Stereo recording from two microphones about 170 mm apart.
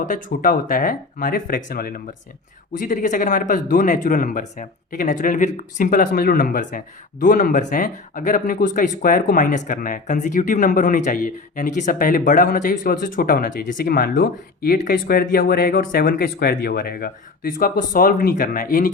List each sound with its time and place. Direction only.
0.0 s speech: 50° left (ahead or behind)